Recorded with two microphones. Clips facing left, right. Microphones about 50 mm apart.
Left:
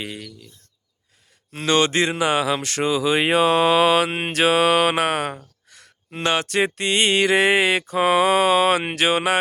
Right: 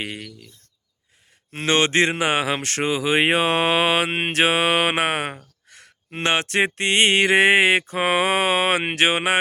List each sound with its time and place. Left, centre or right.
0.0 s mantra: right
1.5 s speech: right
5.6 s a sound: right
6.7 s mantra: right